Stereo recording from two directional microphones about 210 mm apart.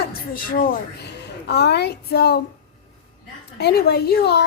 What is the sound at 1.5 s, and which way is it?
Speech, 55° left (ahead or behind).